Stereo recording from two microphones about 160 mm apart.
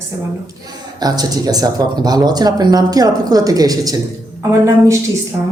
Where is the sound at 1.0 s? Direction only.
25° right (ahead or behind).